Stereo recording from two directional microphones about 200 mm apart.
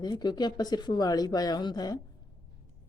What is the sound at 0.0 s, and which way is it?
A woman's voice, 20° left (ahead or behind).